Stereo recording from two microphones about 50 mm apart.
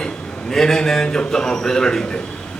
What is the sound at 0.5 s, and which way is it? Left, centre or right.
A man's voice, centre.